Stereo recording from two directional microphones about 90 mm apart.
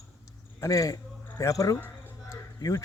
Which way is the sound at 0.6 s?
40° left (ahead or behind).